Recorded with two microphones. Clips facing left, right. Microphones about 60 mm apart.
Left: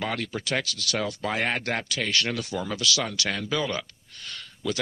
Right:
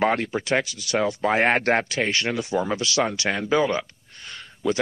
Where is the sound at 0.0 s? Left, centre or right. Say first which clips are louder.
Right 8 dB; right.